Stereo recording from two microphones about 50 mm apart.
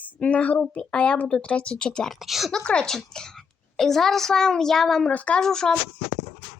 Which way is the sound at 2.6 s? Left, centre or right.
Centre.